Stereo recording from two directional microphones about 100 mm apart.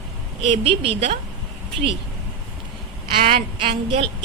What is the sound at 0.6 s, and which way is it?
Speech, 65° right (ahead or behind).